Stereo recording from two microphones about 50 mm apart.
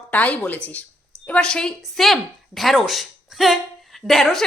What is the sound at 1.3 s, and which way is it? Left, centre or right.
Speech, centre.